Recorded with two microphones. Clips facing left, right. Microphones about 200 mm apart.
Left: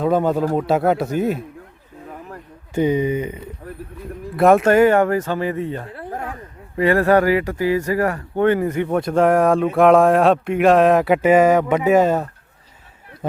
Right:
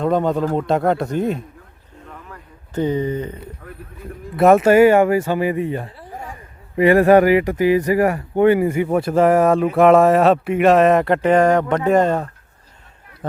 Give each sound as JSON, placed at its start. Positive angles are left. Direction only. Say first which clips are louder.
{"t": 0.0, "sound": "speech", "louder": "even", "side_deg": 5}
{"t": 2.7, "sound": "speech", "louder": "left 2 dB", "side_deg": 10}
{"t": 4.4, "sound": "speech", "louder": "right 2 dB", "side_deg": 0}
{"t": 5.9, "sound": "a sound", "louder": "left 5 dB", "side_deg": 60}
{"t": 6.7, "sound": "speech", "louder": "right 4 dB", "side_deg": -15}